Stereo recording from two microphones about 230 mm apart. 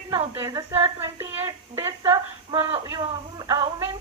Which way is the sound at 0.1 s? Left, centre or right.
Centre.